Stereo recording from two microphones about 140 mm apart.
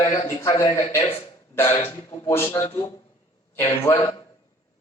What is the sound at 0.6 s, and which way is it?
A man's voice, 20° left (ahead or behind).